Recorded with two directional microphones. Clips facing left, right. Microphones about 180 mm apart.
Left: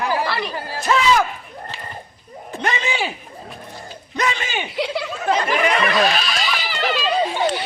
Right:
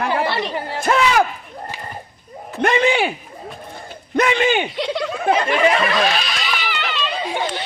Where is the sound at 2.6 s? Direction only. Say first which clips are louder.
Right 7 dB; 55° right (ahead or behind).